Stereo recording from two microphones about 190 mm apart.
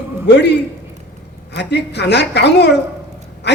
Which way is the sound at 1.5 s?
65° left (ahead or behind).